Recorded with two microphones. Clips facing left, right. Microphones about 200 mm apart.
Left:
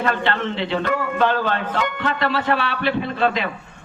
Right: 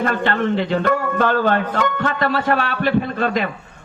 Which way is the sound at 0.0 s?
45° right (ahead or behind).